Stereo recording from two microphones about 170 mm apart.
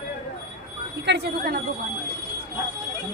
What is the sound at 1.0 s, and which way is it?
Speech, 85° right.